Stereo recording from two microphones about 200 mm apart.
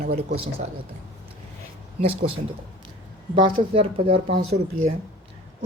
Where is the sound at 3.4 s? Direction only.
25° right (ahead or behind).